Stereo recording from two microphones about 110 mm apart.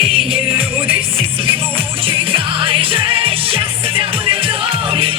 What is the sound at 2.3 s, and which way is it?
Music, 55° right (ahead or behind).